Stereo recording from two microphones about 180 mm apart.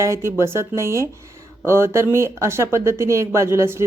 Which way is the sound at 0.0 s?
15° right (ahead or behind).